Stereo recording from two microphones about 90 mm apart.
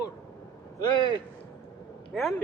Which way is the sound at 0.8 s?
55° left (ahead or behind).